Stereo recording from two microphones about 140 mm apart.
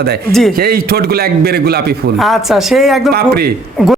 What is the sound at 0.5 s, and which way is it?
Speech, 90° right.